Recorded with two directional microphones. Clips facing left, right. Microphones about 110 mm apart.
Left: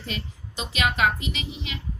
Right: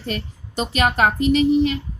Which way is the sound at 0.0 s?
45° right (ahead or behind).